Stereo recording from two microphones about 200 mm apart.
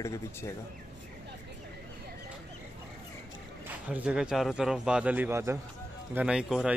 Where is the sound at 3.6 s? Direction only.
5° right (ahead or behind).